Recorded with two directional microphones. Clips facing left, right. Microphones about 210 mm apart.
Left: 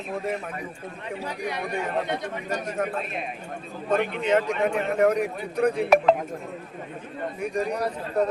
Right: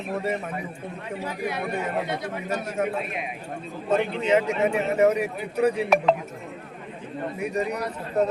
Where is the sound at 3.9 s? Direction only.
30° right (ahead or behind).